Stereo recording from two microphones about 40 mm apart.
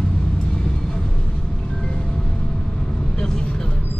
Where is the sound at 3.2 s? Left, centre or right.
Centre.